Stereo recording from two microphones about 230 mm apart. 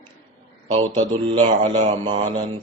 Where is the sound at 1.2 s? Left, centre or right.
Right.